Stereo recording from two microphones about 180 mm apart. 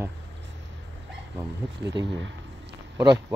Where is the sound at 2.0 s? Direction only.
80° right.